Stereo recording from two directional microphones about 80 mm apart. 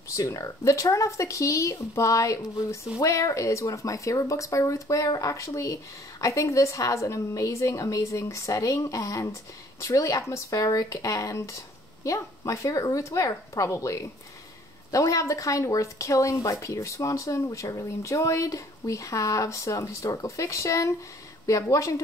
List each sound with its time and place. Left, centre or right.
0.1 s speech: left